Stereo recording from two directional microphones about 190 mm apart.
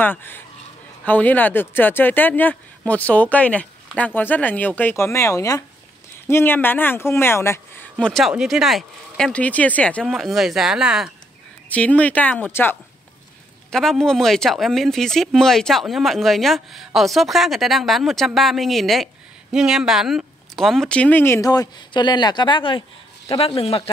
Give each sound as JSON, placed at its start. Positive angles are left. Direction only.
{"t": 0.0, "sound": "speech", "side_deg": 10}
{"t": 11.7, "sound": "speech", "side_deg": 5}